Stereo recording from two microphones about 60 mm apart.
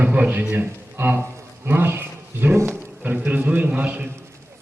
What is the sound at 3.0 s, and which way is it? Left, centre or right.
A man's voice, right.